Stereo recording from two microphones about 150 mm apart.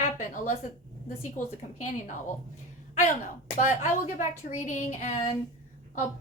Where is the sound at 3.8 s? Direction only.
55° left (ahead or behind).